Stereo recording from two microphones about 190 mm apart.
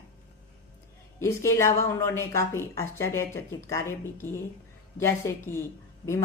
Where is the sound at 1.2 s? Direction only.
15° left (ahead or behind).